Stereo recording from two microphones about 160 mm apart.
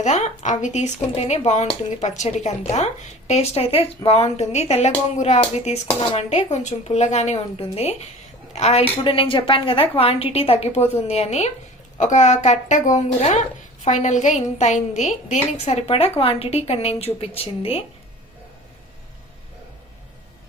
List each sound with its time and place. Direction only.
0.0 s a woman's voice: 50° left (ahead or behind)